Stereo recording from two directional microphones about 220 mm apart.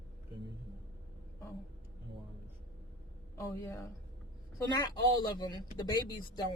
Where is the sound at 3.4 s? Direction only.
15° left (ahead or behind).